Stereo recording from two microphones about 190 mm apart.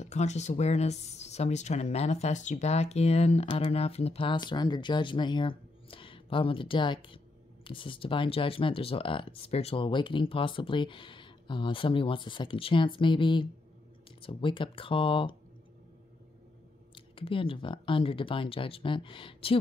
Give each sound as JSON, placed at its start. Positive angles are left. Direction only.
{"t": 0.0, "sound": "speech", "side_deg": 35}
{"t": 16.9, "sound": "speech", "side_deg": 30}